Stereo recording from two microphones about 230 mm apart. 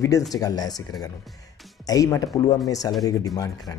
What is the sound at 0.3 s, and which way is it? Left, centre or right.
Speech, centre.